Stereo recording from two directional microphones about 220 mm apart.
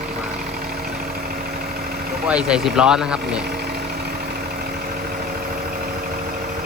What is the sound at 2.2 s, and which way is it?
Speech, 5° right (ahead or behind).